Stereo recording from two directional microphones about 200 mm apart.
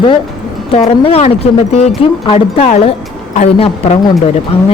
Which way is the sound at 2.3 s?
30° left (ahead or behind).